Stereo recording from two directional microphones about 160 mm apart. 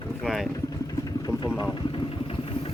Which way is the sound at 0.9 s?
25° left (ahead or behind).